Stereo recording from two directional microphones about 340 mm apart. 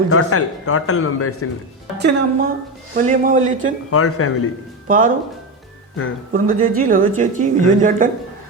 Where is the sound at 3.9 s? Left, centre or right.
Left.